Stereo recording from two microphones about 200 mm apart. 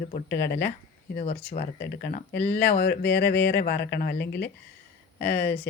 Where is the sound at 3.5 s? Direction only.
55° left (ahead or behind).